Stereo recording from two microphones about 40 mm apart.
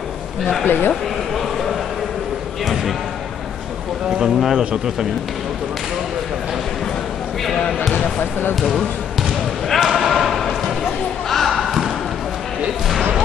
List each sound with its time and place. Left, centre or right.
0.7 s speech: left
1.3 s a sound: centre
4.2 s a man's voice: centre
8.2 s speech: left
8.5 s speech: centre
9.8 s basketball bounce: centre
11.2 s a sound: centre